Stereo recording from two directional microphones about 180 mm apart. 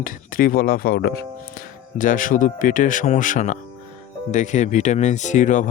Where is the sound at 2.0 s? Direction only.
50° left (ahead or behind).